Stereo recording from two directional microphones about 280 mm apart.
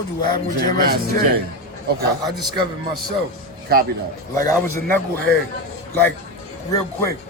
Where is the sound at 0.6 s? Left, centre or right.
Right.